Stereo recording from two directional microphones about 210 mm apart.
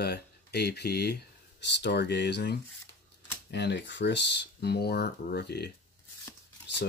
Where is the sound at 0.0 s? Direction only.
50° left (ahead or behind).